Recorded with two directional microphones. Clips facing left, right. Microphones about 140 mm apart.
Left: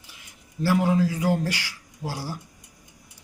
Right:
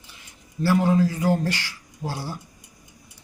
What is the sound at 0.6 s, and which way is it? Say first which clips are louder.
Speech: right 2 dB; 10° left (ahead or behind).